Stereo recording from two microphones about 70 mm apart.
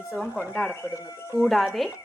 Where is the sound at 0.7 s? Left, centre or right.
Left.